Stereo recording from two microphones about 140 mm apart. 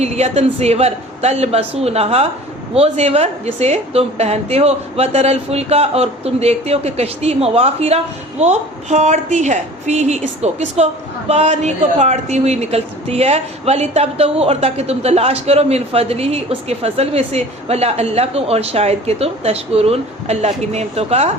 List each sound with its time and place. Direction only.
0.0 s speech: 50° right (ahead or behind)